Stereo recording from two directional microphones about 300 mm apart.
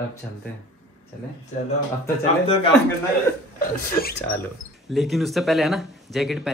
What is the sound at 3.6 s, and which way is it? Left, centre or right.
Speech, left.